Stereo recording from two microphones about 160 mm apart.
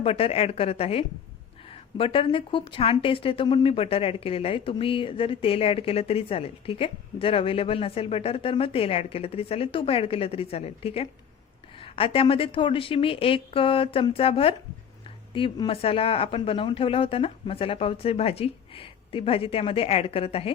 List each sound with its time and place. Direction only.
0.0 s a woman's voice: 35° left (ahead or behind)